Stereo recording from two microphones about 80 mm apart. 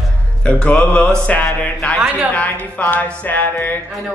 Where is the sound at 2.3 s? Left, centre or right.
Centre.